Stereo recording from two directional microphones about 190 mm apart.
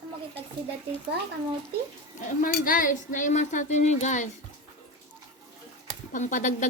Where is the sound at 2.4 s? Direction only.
45° left (ahead or behind).